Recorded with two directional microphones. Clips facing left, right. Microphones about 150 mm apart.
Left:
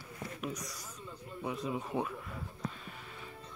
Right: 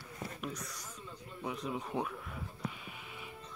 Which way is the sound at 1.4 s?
Centre (ahead or behind).